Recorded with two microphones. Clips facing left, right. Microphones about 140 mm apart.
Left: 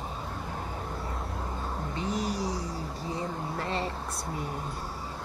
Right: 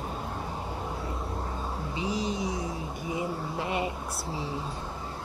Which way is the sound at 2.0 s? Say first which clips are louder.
Right 1 dB; centre (ahead or behind).